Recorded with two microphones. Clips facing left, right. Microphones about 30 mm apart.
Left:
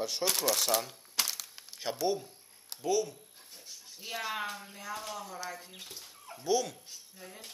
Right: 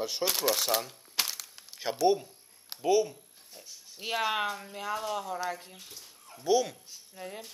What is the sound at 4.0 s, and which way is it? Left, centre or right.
Speech, right.